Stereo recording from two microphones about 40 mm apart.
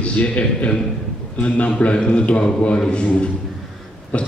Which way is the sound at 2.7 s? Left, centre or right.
Centre.